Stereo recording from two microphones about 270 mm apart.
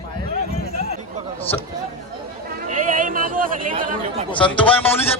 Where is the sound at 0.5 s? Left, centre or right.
Left.